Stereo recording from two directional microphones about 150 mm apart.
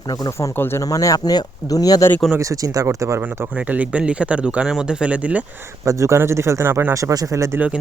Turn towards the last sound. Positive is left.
turn(degrees=-10)  # may be behind; listen again after turning